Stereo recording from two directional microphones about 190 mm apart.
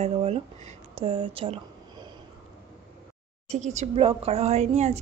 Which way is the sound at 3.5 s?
35° right (ahead or behind).